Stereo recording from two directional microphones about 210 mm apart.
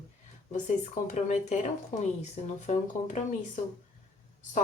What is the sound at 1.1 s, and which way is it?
Speech, 35° left (ahead or behind).